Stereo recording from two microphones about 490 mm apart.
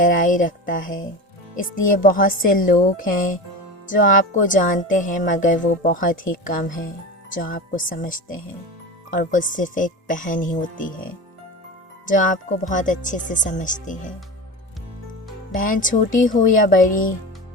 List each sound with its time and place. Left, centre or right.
0.0 s speech: centre
12.0 s speech: centre
15.5 s speech: centre